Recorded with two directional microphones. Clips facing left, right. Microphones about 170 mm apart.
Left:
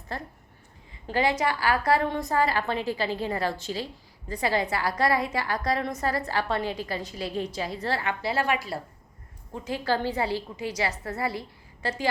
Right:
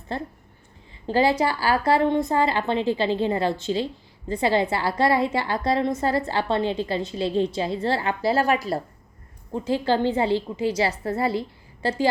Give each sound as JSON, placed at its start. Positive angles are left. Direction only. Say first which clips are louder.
{"t": 0.1, "sound": "a woman's voice", "louder": "right 6 dB", "side_deg": -25}
{"t": 9.5, "sound": "a woman's voice", "louder": "right 5 dB", "side_deg": -30}